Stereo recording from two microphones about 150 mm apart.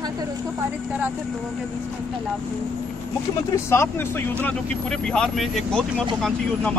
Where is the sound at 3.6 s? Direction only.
15° left (ahead or behind).